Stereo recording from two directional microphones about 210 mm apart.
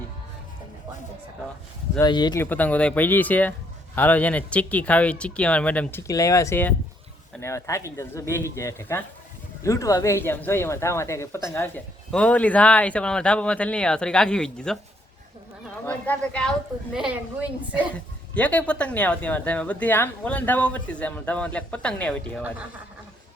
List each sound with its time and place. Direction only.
2.0 s speech: 20° left (ahead or behind); by 14.8 s 5° left (ahead or behind)
15.9 s speech: 5° left (ahead or behind)
18.3 s speech: 5° left (ahead or behind)